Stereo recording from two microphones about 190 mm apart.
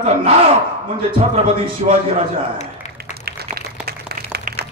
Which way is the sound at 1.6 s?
30° right (ahead or behind).